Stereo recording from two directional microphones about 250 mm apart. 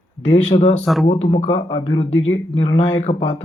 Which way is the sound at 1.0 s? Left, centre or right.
Centre.